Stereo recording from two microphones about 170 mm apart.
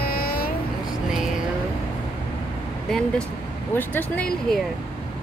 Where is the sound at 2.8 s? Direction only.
5° left (ahead or behind).